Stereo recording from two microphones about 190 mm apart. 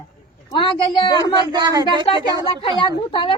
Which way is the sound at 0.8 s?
30° left (ahead or behind).